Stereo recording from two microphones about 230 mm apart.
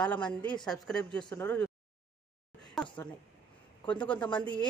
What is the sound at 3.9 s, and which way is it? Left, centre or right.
Speech, centre.